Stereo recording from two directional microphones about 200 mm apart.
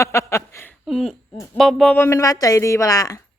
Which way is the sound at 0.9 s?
Centre (ahead or behind).